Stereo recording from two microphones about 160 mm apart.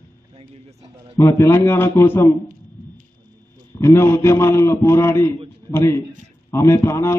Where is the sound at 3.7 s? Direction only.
15° left (ahead or behind).